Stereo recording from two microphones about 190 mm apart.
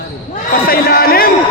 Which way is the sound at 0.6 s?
50° left (ahead or behind).